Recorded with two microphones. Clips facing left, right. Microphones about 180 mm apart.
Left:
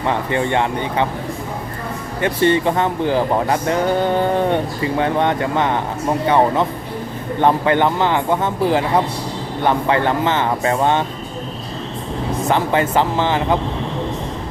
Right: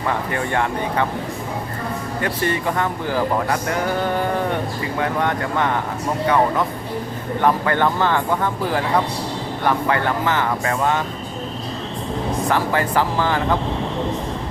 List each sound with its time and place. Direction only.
0.3 s speech: 20° left (ahead or behind)
2.2 s speech: 25° left (ahead or behind)
12.5 s speech: 20° left (ahead or behind)